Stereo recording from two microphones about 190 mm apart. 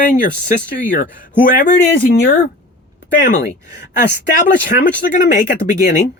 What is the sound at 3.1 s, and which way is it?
Speech, 45° left (ahead or behind).